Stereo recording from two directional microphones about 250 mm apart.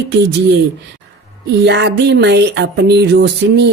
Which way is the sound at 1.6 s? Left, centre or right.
Right.